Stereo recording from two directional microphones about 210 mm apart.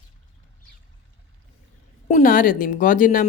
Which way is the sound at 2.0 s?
40° left (ahead or behind).